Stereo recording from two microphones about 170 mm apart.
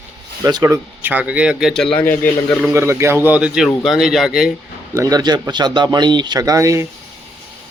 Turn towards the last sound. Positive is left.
turn(degrees=-20)  # may be behind; listen again after turning